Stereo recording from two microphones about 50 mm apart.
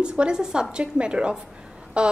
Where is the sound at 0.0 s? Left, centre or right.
Centre.